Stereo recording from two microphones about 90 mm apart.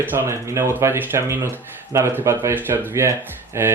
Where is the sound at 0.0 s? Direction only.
25° right (ahead or behind).